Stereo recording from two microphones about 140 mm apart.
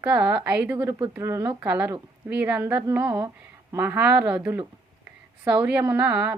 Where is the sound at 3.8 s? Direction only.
10° right (ahead or behind).